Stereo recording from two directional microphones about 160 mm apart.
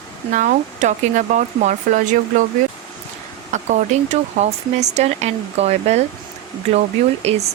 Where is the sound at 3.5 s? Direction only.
50° right (ahead or behind).